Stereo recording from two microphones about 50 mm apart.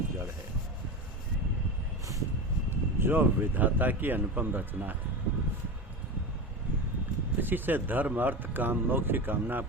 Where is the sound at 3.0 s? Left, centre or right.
Right.